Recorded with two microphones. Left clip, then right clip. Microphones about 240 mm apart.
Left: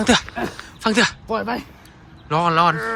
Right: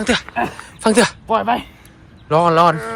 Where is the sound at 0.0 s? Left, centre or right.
Centre.